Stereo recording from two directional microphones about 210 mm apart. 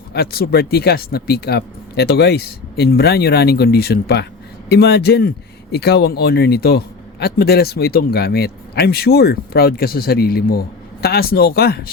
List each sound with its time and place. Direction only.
0.1 s a man's voice: 50° left (ahead or behind)